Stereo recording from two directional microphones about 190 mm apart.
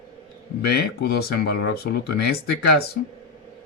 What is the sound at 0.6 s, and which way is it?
Speech, 60° left (ahead or behind).